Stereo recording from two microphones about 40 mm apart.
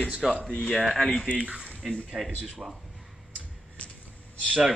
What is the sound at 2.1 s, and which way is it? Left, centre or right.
Speech, centre.